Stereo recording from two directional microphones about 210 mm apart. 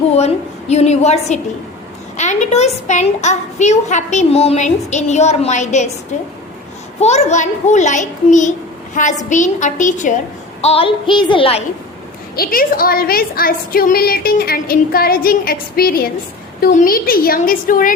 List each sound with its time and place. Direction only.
0.2 s a woman's voice: 30° left (ahead or behind)
7.0 s a woman's voice: 30° left (ahead or behind)
10.6 s child singing: 30° left (ahead or behind)
12.4 s a woman's voice: 45° left (ahead or behind)